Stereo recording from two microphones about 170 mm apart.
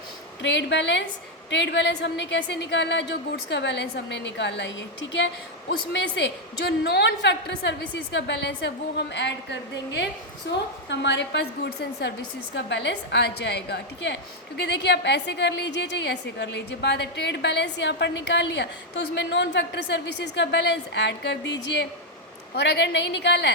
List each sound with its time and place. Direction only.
0.4 s a woman's voice: 90° left
12.5 s a woman's voice: 90° left